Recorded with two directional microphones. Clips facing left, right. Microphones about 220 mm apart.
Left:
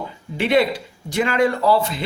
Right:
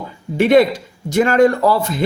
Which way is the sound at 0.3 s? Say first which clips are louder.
Right 6 dB; 45° right (ahead or behind).